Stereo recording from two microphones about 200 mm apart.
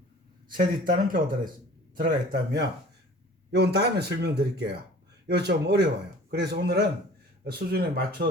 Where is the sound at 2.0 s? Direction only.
50° right (ahead or behind).